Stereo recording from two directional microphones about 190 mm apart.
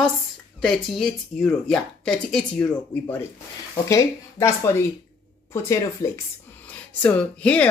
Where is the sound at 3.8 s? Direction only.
15° left (ahead or behind).